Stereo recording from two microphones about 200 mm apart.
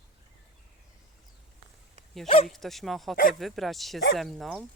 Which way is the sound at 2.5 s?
Centre (ahead or behind).